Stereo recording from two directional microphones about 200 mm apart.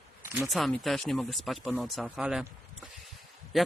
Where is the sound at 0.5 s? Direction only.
Centre (ahead or behind).